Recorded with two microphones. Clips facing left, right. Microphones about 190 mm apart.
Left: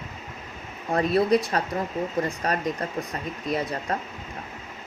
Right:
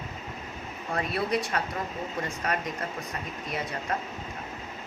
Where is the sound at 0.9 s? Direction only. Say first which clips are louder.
Left 8 dB; 35° left (ahead or behind).